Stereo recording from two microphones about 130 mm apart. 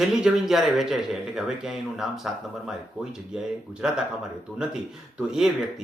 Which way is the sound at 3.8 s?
5° right (ahead or behind).